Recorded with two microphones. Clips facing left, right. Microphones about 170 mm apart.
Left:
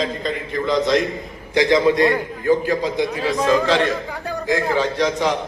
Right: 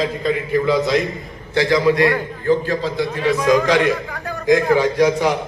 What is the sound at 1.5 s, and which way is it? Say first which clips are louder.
A man's voice: even; 20° left (ahead or behind).